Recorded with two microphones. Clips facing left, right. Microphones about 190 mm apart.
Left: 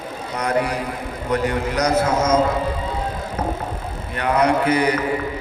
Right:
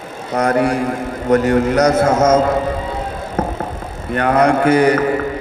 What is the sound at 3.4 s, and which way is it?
Vehicle, 50° right (ahead or behind).